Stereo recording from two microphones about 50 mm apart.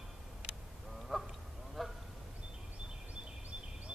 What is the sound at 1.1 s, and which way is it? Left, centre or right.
Honk, centre.